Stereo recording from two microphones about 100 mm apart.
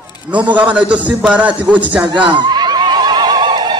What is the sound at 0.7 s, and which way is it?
A man's voice, 15° right (ahead or behind).